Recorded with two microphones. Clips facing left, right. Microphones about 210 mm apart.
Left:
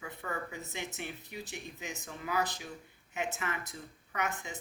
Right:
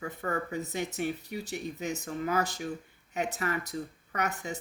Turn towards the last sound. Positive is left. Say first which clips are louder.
# right 4 dB
turn(degrees=-40)  # may be behind; listen again after turning